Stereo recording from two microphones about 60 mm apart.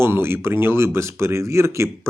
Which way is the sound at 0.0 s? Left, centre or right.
Right.